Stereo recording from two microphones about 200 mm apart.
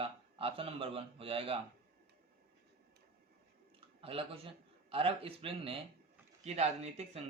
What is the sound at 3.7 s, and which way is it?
Speech, 30° right (ahead or behind).